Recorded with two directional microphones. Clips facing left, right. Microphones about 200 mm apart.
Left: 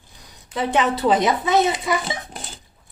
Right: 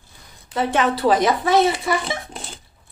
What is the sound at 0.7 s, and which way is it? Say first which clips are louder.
A woman's voice: even; 25° left (ahead or behind).